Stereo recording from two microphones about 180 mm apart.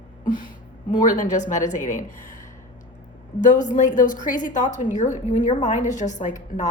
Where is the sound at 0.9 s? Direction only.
45° left (ahead or behind).